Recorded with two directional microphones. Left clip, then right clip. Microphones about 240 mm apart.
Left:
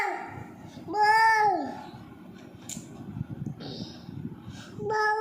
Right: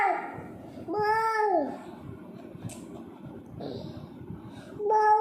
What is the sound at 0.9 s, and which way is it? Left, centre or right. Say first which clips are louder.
Babbling: left 5 dB; centre.